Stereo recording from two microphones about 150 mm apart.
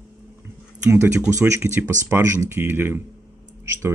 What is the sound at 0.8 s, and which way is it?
Speech, 15° right (ahead or behind).